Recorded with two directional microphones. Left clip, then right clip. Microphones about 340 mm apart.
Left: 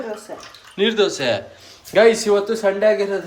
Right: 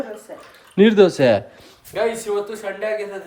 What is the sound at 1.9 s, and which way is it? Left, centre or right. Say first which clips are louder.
Speech: left 9 dB; left.